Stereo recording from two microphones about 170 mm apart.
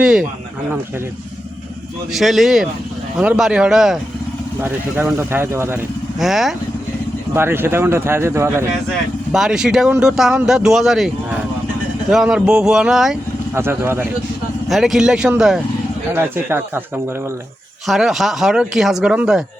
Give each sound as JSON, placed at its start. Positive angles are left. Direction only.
{"t": 0.0, "sound": "speech", "side_deg": -5}
{"t": 2.1, "sound": "speech", "side_deg": 0}
{"t": 6.1, "sound": "speech", "side_deg": 0}
{"t": 7.3, "sound": "speech", "side_deg": -15}
{"t": 9.3, "sound": "speech", "side_deg": -5}
{"t": 13.5, "sound": "speech", "side_deg": -15}
{"t": 14.7, "sound": "speech", "side_deg": 0}
{"t": 17.8, "sound": "speech", "side_deg": 0}